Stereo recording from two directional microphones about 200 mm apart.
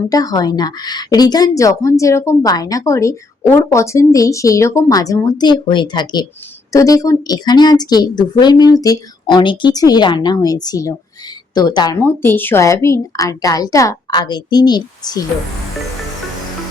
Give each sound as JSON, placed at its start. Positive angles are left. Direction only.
{"t": 0.1, "sound": "a woman's voice", "side_deg": 20}